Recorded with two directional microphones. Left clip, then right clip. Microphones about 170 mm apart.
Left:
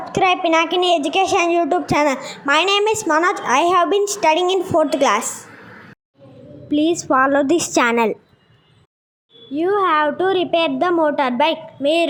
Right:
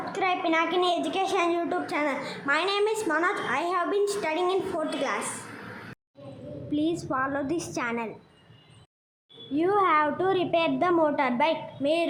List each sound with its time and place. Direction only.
0.0 s speech: 35° left (ahead or behind)
6.7 s a woman's voice: 45° left (ahead or behind)
9.5 s speech: 25° left (ahead or behind)